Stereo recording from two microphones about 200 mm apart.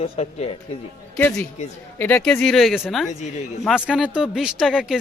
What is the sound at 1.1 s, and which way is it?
Speech, 5° left (ahead or behind).